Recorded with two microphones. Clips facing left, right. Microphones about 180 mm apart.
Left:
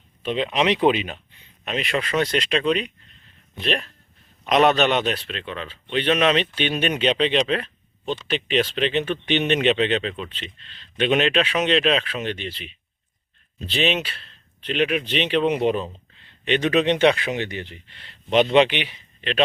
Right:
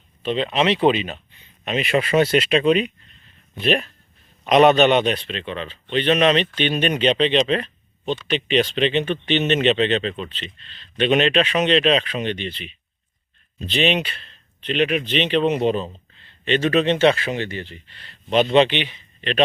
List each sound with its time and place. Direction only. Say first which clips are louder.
0.2 s speech: right 2 dB; 10° left (ahead or behind)
1.6 s speech: right 4 dB; 5° right (ahead or behind); by 18.4 s 20° left (ahead or behind)
18.5 s speech: right 1 dB; 10° left (ahead or behind)